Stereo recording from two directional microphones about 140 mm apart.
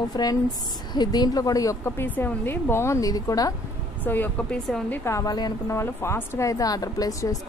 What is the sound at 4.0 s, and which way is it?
A woman's voice, 10° left (ahead or behind).